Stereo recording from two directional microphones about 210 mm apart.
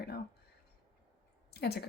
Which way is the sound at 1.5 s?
50° left (ahead or behind).